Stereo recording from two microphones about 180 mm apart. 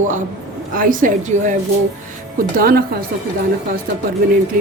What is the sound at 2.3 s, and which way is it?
Speech, 55° right (ahead or behind).